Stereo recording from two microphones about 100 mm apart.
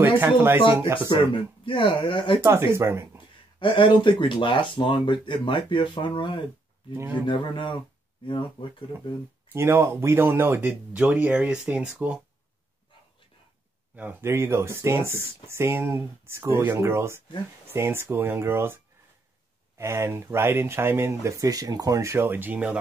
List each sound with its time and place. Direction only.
0.2 s speech: 20° right (ahead or behind)
0.9 s speech: 55° left (ahead or behind)
2.4 s speech: 25° right (ahead or behind)
3.5 s speech: 55° left (ahead or behind)
6.9 s speech: 25° right (ahead or behind)
7.2 s speech: 50° left (ahead or behind)
9.5 s speech: 25° right (ahead or behind)
14.2 s speech: 25° right (ahead or behind)
19.8 s speech: 30° right (ahead or behind)